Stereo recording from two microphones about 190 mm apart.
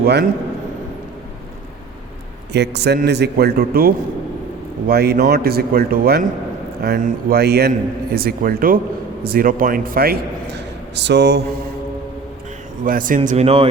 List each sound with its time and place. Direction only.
0.0 s a man's voice: 55° right (ahead or behind)
2.5 s a man's voice: 60° right (ahead or behind)
12.8 s speech: 45° right (ahead or behind)